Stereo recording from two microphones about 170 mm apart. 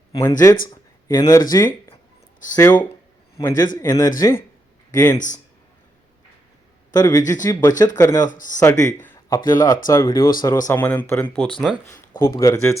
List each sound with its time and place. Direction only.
0.2 s speech: 15° left (ahead or behind)
5.1 s speech: 45° left (ahead or behind)
6.9 s speech: 20° left (ahead or behind)
8.3 s speech: 50° left (ahead or behind)
8.5 s speech: 20° left (ahead or behind)